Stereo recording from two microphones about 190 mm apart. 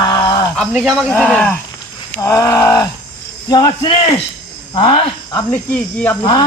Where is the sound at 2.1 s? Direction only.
15° left (ahead or behind).